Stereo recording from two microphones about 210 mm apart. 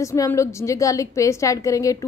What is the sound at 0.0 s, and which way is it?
A woman's voice, 15° left (ahead or behind).